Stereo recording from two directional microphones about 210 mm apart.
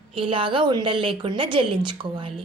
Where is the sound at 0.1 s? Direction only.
25° right (ahead or behind).